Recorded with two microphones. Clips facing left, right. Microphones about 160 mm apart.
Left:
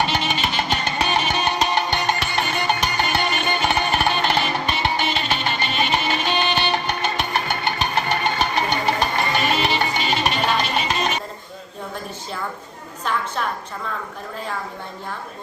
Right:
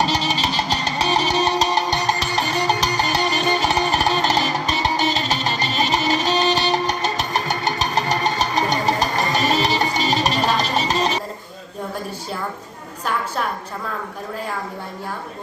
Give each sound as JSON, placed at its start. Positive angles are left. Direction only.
{"t": 0.0, "sound": "music", "side_deg": -35}